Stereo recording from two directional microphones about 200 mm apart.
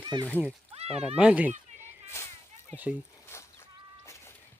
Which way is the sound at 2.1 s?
15° left (ahead or behind).